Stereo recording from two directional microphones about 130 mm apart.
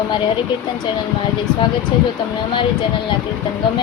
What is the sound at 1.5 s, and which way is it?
Speech, 5° left (ahead or behind).